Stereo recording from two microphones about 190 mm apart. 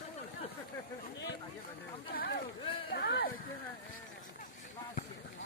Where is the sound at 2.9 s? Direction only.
60° left (ahead or behind).